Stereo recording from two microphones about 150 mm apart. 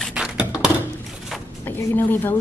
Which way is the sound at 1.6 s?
15° left (ahead or behind).